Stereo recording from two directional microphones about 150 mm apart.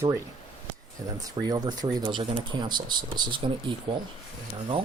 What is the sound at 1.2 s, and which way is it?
Speech, 25° right (ahead or behind).